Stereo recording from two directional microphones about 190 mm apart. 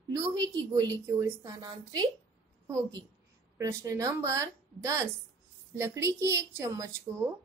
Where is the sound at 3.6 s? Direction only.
15° right (ahead or behind).